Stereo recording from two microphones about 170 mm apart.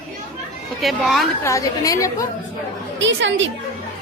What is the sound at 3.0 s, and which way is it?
Speech, 90° right.